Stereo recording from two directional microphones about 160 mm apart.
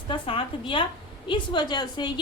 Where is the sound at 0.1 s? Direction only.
30° left (ahead or behind).